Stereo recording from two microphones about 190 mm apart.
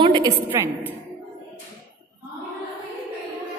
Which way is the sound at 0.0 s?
25° right (ahead or behind).